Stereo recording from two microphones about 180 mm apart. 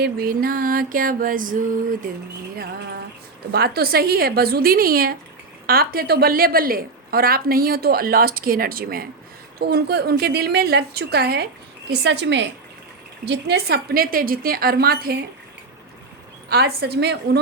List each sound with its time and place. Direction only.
0.0 s music: 55° right (ahead or behind)
3.5 s a woman's voice: 60° right (ahead or behind)
11.9 s a woman's voice: 75° right (ahead or behind); by 15.2 s 55° right (ahead or behind)
16.5 s a woman's voice: 65° right (ahead or behind)